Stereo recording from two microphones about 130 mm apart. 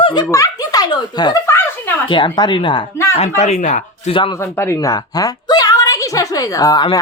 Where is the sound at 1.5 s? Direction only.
15° left (ahead or behind).